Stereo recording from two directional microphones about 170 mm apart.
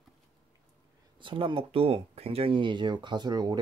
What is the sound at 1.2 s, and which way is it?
Speech, 30° right (ahead or behind).